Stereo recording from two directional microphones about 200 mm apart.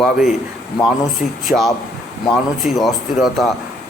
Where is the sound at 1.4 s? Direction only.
Centre (ahead or behind).